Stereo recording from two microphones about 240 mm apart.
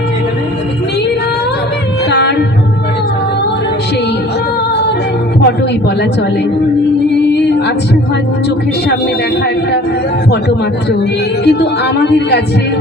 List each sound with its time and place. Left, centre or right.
2.0 s music: left
11.4 s speech: left